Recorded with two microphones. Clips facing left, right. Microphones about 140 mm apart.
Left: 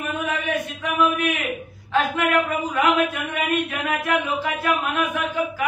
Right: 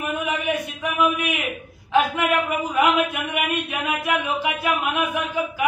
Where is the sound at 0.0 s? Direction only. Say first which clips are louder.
Right 1 dB; 15° right (ahead or behind).